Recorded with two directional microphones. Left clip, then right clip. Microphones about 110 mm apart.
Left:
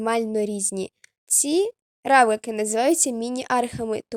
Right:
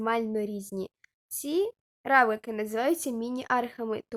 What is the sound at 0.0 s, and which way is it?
Speech, 45° left (ahead or behind).